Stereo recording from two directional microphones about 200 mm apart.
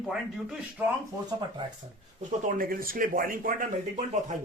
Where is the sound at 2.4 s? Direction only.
45° right (ahead or behind).